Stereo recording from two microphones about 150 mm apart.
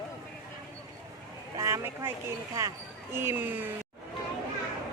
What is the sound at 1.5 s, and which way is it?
Speech, 20° right (ahead or behind).